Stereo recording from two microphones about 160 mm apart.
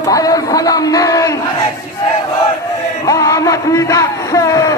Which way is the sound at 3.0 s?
20° left (ahead or behind).